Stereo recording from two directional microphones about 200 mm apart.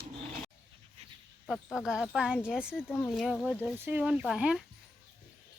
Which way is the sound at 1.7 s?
Centre (ahead or behind).